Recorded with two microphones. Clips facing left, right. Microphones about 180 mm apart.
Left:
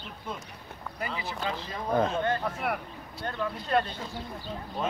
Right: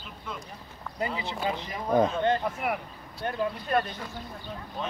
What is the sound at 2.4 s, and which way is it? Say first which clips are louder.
Speech: right 1 dB; 5° right (ahead or behind).